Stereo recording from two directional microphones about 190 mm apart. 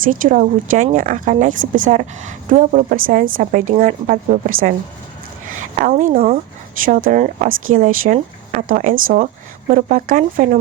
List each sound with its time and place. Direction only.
0.0 s a woman's voice: 45° right (ahead or behind)
5.8 s a woman's voice: 45° right (ahead or behind)